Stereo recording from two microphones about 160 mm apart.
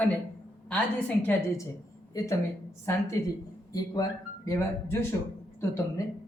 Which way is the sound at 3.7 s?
20° left (ahead or behind).